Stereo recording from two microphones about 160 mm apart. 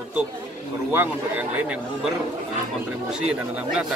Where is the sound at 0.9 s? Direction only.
10° right (ahead or behind).